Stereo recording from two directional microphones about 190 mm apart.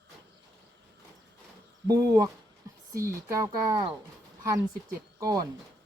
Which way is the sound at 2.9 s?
15° right (ahead or behind).